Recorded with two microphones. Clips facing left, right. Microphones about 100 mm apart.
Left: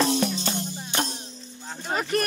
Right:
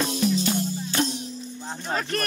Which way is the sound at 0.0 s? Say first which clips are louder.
Left 2 dB; 75° left (ahead or behind).